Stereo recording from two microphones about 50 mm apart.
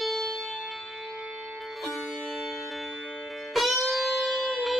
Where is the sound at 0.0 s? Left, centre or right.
Centre.